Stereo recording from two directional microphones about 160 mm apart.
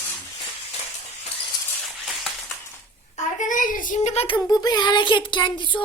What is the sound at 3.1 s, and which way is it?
A child's voice, 55° left (ahead or behind).